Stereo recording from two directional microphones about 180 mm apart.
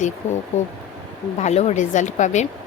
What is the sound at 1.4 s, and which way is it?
A woman's voice, 40° left (ahead or behind).